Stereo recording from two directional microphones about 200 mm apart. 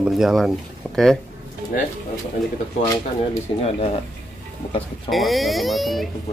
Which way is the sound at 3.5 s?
25° left (ahead or behind).